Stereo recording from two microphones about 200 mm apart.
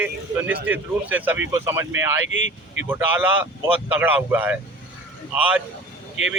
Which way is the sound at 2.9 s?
10° right (ahead or behind).